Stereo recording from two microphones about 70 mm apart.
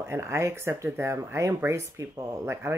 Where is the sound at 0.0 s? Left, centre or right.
Right.